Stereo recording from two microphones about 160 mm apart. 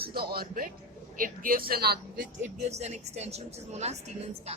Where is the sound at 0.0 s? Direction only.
75° right (ahead or behind).